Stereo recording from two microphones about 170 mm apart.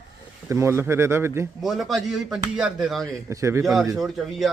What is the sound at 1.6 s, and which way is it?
A man's voice, centre (ahead or behind).